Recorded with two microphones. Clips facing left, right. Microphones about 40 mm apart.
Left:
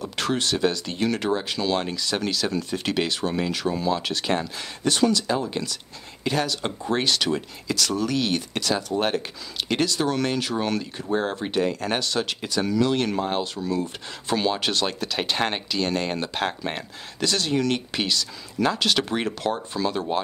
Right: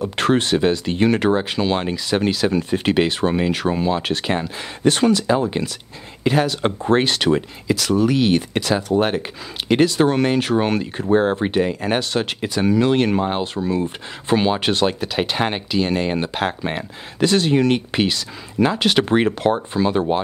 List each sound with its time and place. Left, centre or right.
0.1 s speech: right
7.6 s speech: centre
17.2 s speech: right